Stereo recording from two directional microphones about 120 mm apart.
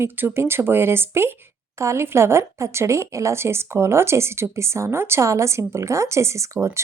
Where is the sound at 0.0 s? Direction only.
15° right (ahead or behind).